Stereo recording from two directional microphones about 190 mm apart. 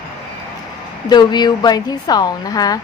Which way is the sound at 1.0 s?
20° left (ahead or behind).